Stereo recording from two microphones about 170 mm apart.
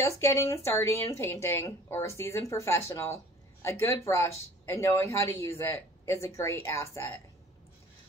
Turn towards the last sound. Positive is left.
turn(degrees=15)  # may be behind; listen again after turning